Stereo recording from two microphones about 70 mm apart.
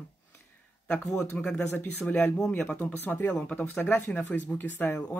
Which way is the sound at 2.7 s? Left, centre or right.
Left.